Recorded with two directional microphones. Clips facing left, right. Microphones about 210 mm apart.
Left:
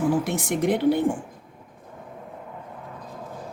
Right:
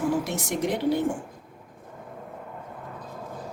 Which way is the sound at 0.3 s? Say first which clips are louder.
Left 4 dB; 55° left (ahead or behind).